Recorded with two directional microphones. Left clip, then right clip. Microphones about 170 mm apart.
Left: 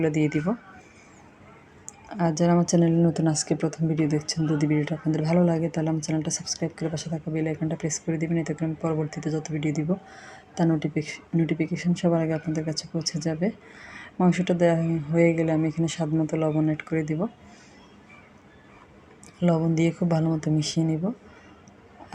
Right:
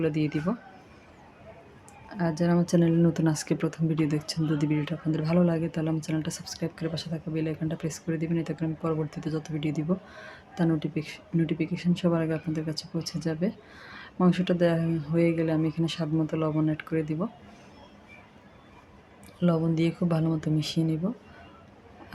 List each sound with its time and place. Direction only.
0.0 s speech: 10° left (ahead or behind)
2.0 s a woman's voice: 20° left (ahead or behind)
13.9 s speech: 5° left (ahead or behind)
19.4 s speech: 10° left (ahead or behind)